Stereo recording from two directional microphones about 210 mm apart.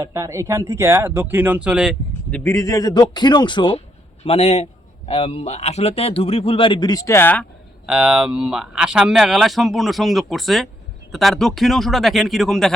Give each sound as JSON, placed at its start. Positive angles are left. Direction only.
{"t": 0.0, "sound": "speech", "side_deg": -15}
{"t": 2.4, "sound": "speech", "side_deg": 15}
{"t": 7.9, "sound": "speech", "side_deg": -5}